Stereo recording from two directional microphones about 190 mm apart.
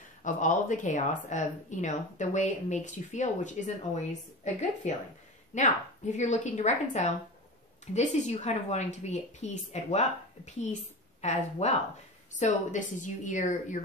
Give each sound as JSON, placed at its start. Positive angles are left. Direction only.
{"t": 0.2, "sound": "speech", "side_deg": 40}